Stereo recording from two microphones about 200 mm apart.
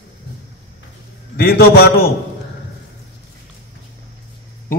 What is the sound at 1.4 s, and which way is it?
Speech, 50° left (ahead or behind).